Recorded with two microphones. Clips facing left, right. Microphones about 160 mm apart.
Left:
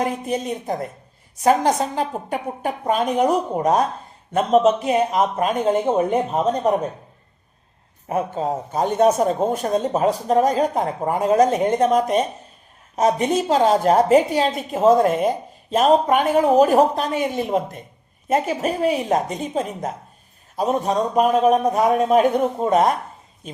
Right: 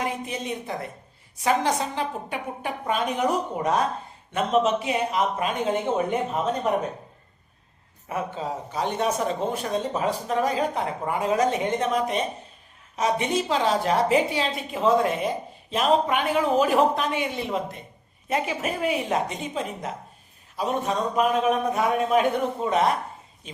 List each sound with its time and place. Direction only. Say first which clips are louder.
0.0 s speech: left 6 dB; 45° left (ahead or behind)
8.0 s a man's voice: left 7 dB; 40° left (ahead or behind)